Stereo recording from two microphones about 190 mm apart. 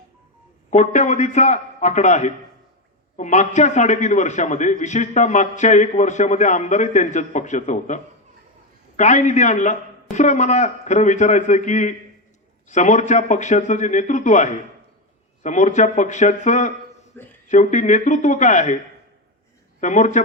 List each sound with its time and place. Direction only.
0.7 s a man's voice: 40° left (ahead or behind)
17.2 s speech: 10° left (ahead or behind)
17.5 s a man's voice: 40° left (ahead or behind)
19.8 s a man's voice: 40° left (ahead or behind)